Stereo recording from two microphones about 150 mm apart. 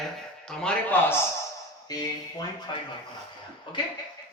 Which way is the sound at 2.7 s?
30° left (ahead or behind).